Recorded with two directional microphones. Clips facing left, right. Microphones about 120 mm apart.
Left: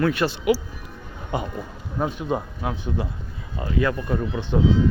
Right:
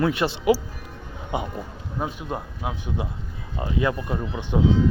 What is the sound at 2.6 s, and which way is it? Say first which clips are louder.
A man's voice: left 2 dB; 10° right (ahead or behind).